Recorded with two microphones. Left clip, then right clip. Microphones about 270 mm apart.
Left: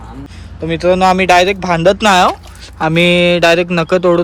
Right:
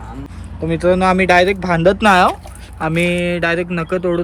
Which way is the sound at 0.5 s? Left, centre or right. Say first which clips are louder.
Left 3 dB; centre.